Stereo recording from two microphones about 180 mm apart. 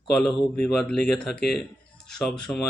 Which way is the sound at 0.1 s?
5° left (ahead or behind).